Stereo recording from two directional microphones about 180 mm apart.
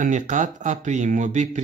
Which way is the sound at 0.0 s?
40° right (ahead or behind).